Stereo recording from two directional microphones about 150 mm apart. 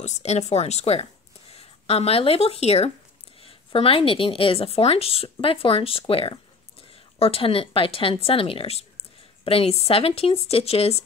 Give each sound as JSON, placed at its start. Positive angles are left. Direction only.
{"t": 0.0, "sound": "a woman's voice", "side_deg": 50}